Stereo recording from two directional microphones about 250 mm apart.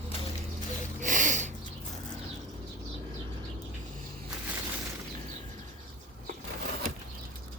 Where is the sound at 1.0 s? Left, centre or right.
Right.